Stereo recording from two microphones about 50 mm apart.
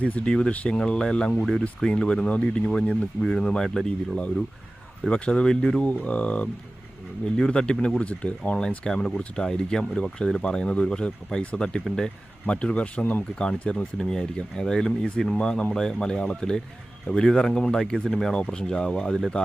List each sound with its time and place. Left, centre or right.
0.3 s speech: centre
5.8 s speech: left
7.3 s speech: centre
8.8 s speech: centre